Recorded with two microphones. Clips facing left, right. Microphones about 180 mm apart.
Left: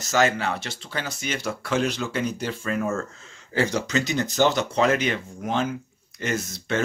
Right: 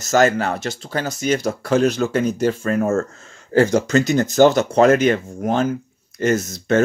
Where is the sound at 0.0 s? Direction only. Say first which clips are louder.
Right 6 dB; 45° right (ahead or behind).